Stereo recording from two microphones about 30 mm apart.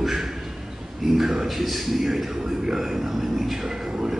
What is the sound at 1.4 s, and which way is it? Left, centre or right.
A man's voice, centre.